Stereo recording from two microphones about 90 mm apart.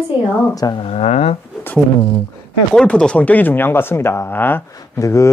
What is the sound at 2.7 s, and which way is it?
Speech, 10° left (ahead or behind).